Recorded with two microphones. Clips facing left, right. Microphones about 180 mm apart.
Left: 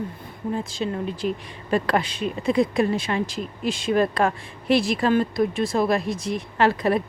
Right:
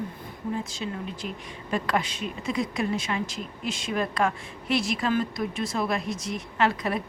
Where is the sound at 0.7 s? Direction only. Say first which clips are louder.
Left 6 dB; 30° left (ahead or behind).